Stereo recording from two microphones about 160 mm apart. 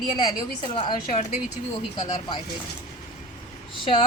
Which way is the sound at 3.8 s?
30° left (ahead or behind).